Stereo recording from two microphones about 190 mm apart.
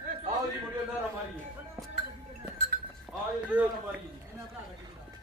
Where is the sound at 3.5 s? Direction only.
10° right (ahead or behind).